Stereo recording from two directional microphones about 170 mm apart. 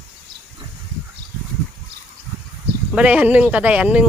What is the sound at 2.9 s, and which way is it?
Speech, 10° right (ahead or behind).